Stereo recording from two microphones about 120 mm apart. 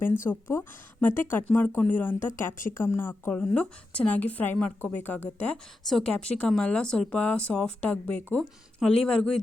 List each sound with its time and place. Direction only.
0.3 s speech: 20° left (ahead or behind); by 9.4 s 5° left (ahead or behind)